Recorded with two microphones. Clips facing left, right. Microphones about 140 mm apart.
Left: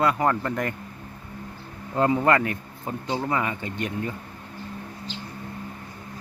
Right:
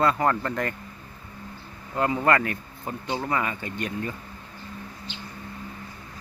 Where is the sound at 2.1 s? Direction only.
20° left (ahead or behind).